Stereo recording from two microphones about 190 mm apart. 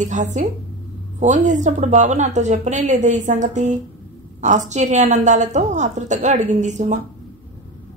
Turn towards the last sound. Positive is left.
turn(degrees=-40)  # may be behind; listen again after turning